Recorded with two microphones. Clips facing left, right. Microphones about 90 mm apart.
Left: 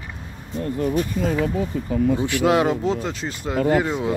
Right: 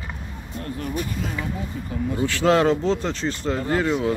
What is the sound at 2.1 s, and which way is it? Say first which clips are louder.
Speech: right 4 dB; 15° left (ahead or behind).